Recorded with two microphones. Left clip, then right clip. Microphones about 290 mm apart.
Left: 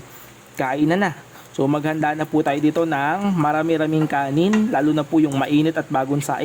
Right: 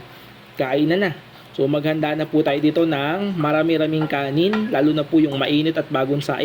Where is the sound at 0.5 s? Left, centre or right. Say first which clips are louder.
Right 1 dB; left.